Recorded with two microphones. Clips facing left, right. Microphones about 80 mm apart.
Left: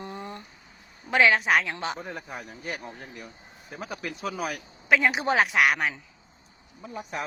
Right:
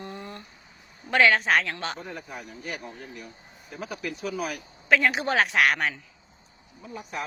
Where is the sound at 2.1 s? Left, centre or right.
Left.